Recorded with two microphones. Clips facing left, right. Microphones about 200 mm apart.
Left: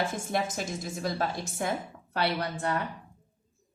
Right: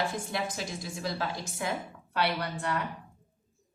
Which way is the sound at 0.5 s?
45° left (ahead or behind).